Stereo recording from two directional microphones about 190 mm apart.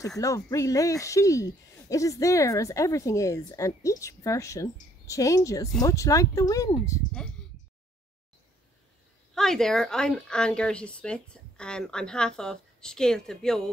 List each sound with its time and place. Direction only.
0.2 s speech: 15° left (ahead or behind)
7.2 s speech: 5° left (ahead or behind)
9.3 s speech: centre (ahead or behind)